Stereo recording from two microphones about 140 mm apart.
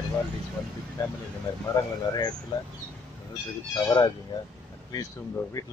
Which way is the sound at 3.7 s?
25° left (ahead or behind).